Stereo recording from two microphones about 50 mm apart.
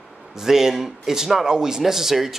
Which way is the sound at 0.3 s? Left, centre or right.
Centre.